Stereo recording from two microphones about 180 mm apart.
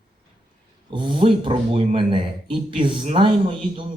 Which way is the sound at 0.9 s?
30° right (ahead or behind).